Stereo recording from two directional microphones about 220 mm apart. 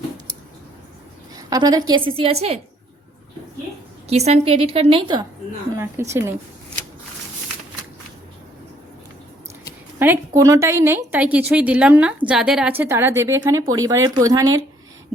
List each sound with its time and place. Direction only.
1.4 s a woman's voice: 15° right (ahead or behind)
4.1 s a woman's voice: 30° right (ahead or behind)
6.0 s a woman's voice: 10° right (ahead or behind)
10.0 s a woman's voice: 10° right (ahead or behind)